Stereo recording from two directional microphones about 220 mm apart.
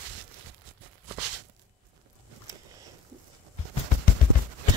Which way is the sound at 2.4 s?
15° right (ahead or behind).